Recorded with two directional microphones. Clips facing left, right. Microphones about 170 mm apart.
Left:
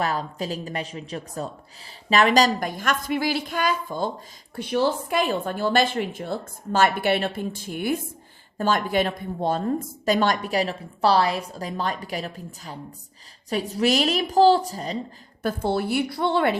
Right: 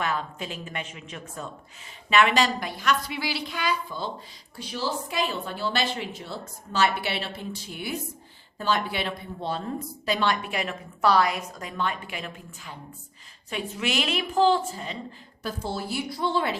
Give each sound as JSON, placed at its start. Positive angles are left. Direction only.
{"t": 0.0, "sound": "a woman's voice", "side_deg": 35}
{"t": 4.5, "sound": "a woman's voice", "side_deg": 60}
{"t": 15.4, "sound": "a woman's voice", "side_deg": 60}